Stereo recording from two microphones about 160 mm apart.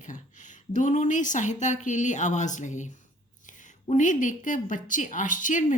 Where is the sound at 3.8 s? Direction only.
50° left (ahead or behind).